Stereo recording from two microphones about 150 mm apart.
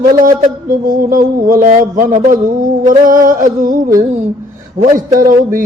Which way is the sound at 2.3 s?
60° right (ahead or behind).